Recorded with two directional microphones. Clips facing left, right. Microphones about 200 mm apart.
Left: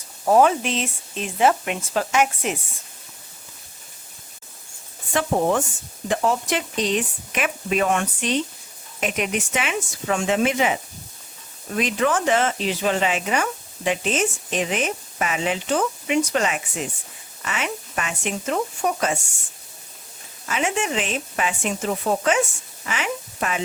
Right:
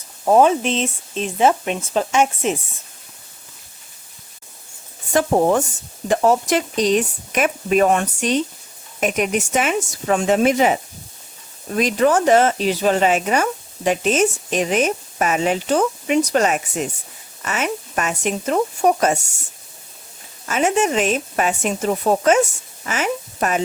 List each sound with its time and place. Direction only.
0.3 s speech: 20° right (ahead or behind)
5.1 s speech: 40° right (ahead or behind)
11.8 s speech: 40° right (ahead or behind)
20.5 s speech: 40° right (ahead or behind)